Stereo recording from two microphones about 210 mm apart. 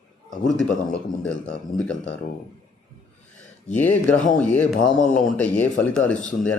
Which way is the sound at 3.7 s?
10° left (ahead or behind).